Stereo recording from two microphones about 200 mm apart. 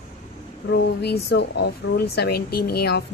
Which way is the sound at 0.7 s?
55° left (ahead or behind).